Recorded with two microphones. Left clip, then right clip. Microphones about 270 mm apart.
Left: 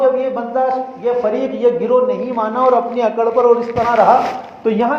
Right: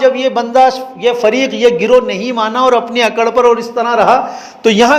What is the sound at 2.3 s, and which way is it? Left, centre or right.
Speech, right.